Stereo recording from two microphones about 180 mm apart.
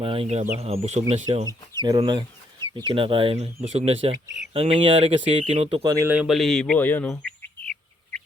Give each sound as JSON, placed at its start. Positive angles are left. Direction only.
{"t": 0.0, "sound": "speech", "side_deg": -30}
{"t": 1.8, "sound": "speech", "side_deg": -25}